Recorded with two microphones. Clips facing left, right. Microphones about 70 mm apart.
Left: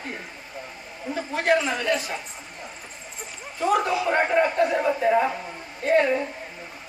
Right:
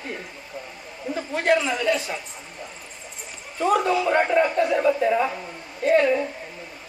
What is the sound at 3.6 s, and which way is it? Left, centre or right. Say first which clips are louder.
Speech: right 2 dB; centre.